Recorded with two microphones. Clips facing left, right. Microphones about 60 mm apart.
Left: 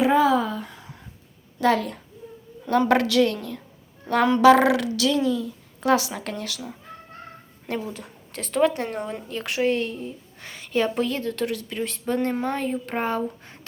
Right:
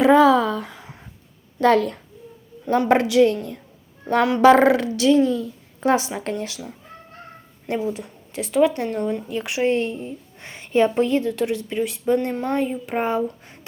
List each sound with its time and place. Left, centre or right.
0.0 s a sound: right
1.6 s a child's voice: right
2.6 s a woman's voice: right
4.4 s speech: right
5.9 s a woman's voice: right
7.7 s a woman's voice: centre
9.3 s speech: centre
9.6 s a woman's voice: right
11.8 s speech: centre
12.3 s a woman's voice: centre
12.5 s speech: centre